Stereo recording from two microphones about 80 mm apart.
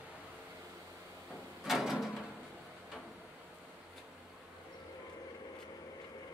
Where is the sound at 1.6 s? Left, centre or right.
Centre.